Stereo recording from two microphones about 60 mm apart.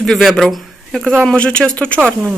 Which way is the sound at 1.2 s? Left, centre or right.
Centre.